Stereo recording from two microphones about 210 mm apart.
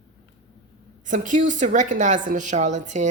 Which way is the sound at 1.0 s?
40° right (ahead or behind).